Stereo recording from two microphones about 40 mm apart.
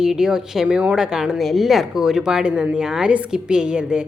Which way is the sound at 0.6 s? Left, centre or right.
Right.